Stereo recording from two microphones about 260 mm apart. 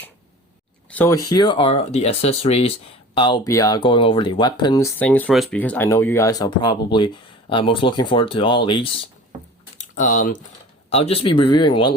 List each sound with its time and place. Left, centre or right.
0.9 s speech: centre
9.7 s typing: left
10.8 s speech: left